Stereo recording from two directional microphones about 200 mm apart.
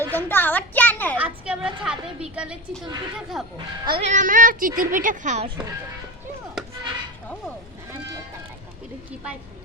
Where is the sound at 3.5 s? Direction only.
25° right (ahead or behind).